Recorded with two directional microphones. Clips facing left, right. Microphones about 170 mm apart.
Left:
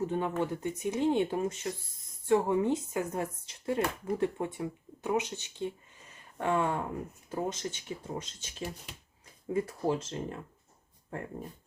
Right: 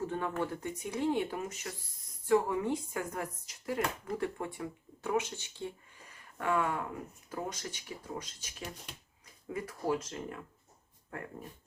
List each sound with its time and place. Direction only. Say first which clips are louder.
0.0 s speech: left 4 dB; 20° left (ahead or behind)